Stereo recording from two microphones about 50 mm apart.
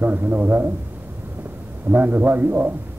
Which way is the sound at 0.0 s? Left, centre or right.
Right.